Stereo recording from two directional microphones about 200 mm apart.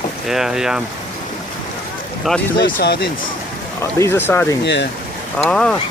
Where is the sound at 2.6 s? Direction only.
55° left (ahead or behind).